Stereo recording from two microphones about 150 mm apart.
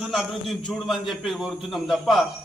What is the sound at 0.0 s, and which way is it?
A man's voice, centre (ahead or behind).